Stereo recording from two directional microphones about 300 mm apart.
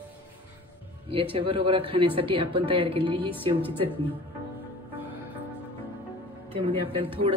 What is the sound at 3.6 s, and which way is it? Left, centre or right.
Speech, centre.